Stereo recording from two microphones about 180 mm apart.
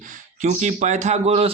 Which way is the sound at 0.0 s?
45° right (ahead or behind).